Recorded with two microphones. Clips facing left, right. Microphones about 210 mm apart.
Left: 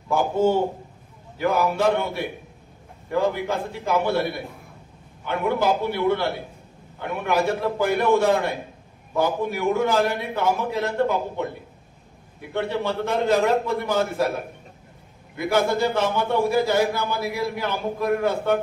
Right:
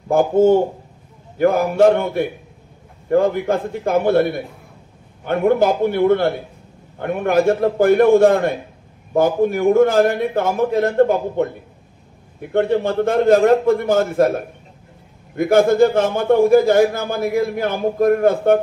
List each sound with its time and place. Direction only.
0.1 s a man's voice: 50° right (ahead or behind)